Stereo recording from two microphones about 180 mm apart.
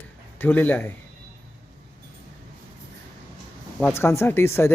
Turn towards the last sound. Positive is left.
turn(degrees=15)  # may be behind; listen again after turning